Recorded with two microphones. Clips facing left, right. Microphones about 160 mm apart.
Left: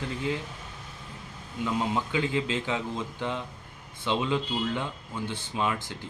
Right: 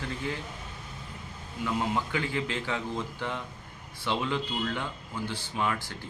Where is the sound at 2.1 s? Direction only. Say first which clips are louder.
Left 3 dB; 20° left (ahead or behind).